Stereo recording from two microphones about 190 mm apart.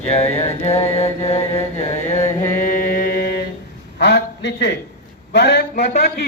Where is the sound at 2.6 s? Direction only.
45° left (ahead or behind).